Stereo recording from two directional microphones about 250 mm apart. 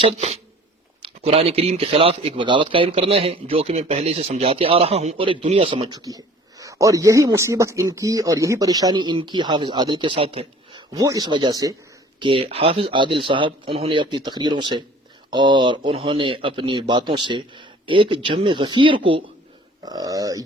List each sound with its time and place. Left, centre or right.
0.0 s speech: right